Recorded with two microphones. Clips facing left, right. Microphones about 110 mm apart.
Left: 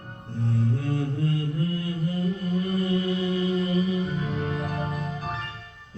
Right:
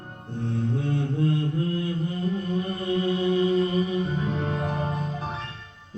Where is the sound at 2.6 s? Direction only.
25° right (ahead or behind).